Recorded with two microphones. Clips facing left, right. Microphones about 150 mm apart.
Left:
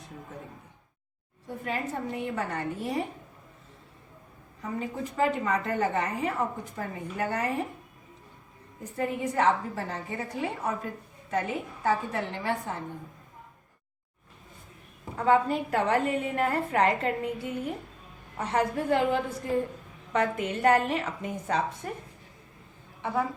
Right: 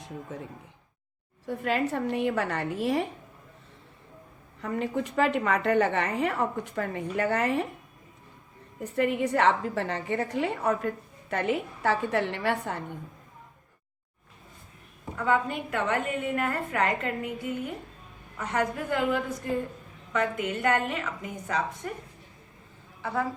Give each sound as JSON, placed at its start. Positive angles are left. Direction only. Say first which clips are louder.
{"t": 1.5, "sound": "a woman's voice", "louder": "right 5 dB", "side_deg": -75}
{"t": 4.6, "sound": "a woman's voice", "louder": "right 4 dB", "side_deg": -70}
{"t": 8.8, "sound": "a woman's voice", "louder": "right 4 dB", "side_deg": -70}
{"t": 15.1, "sound": "a woman's voice", "louder": "left 3 dB", "side_deg": 30}